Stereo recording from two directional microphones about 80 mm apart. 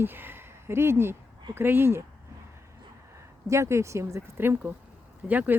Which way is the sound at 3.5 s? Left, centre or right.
Right.